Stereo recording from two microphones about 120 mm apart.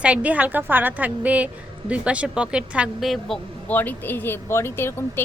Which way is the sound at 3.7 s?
15° left (ahead or behind).